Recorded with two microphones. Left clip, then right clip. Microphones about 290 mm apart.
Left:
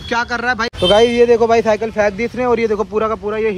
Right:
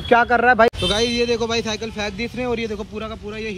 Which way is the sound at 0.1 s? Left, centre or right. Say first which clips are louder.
Right 3 dB; centre.